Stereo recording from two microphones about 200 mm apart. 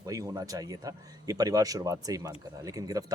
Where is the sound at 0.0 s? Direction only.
15° right (ahead or behind).